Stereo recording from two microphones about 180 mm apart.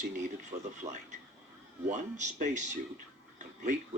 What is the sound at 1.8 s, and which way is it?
Speech, 40° right (ahead or behind).